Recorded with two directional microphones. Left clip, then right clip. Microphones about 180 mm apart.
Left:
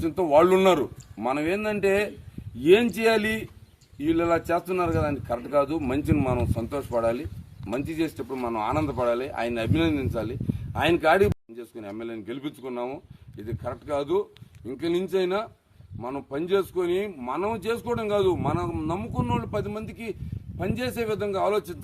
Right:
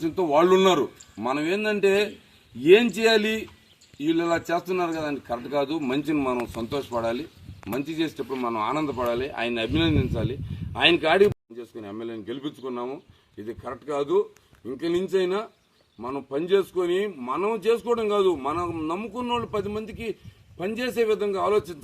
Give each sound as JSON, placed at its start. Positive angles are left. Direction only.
{"t": 0.0, "sound": "a man's voice", "side_deg": 10}
{"t": 14.8, "sound": "a man's voice", "side_deg": 10}